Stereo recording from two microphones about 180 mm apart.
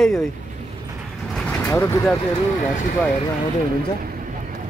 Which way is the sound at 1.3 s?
5° left (ahead or behind).